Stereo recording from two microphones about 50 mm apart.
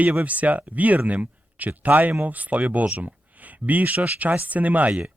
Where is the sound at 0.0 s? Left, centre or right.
Right.